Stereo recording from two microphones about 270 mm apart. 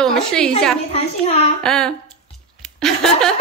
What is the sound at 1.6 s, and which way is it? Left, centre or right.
Speech, centre.